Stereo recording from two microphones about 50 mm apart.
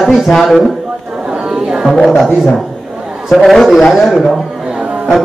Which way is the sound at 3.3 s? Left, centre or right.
Centre.